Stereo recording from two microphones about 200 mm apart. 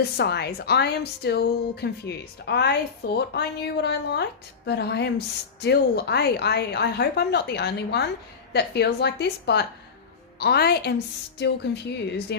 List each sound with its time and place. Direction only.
0.2 s a woman's voice: 55° left (ahead or behind)